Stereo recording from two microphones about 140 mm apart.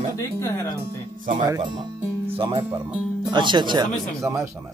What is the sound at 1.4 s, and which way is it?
Speech, 30° right (ahead or behind).